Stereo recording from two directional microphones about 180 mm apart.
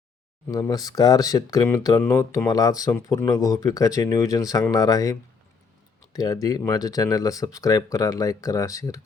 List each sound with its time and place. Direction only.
0.4 s speech: 15° left (ahead or behind)